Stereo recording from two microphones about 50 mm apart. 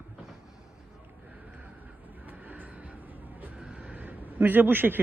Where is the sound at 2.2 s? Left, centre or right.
Right.